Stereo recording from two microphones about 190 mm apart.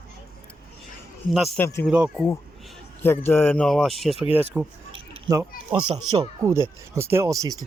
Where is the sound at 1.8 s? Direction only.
5° right (ahead or behind).